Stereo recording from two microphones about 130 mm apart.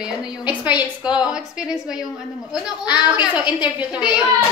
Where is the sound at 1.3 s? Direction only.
5° right (ahead or behind).